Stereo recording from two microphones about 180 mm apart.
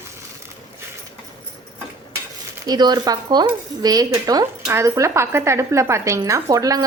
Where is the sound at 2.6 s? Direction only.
20° right (ahead or behind).